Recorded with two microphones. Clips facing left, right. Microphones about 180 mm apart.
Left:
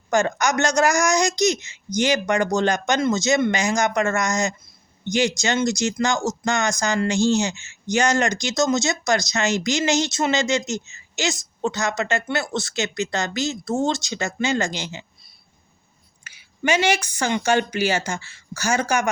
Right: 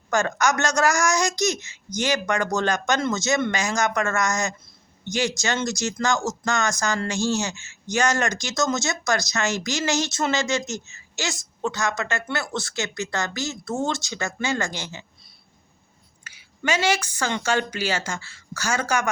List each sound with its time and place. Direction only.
0.1 s speech: 15° left (ahead or behind)
16.2 s a woman's voice: 15° left (ahead or behind)